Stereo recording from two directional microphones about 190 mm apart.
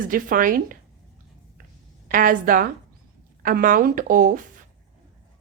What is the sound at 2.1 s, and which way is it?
Speech, 45° right (ahead or behind).